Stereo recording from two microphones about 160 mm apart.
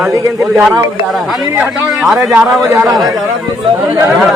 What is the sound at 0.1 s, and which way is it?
Speech, 20° right (ahead or behind).